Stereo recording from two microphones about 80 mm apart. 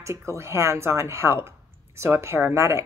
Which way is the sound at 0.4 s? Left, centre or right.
Right.